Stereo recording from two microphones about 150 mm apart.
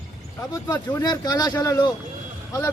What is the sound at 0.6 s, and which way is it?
Speech, 25° left (ahead or behind).